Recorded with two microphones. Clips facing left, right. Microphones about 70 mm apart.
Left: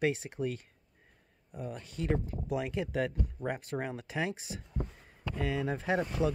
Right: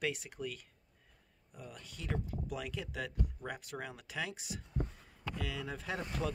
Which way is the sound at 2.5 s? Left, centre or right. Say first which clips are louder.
Left 8 dB; left.